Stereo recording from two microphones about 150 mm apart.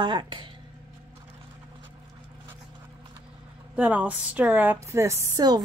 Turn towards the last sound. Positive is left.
turn(degrees=-25)  # may be behind; listen again after turning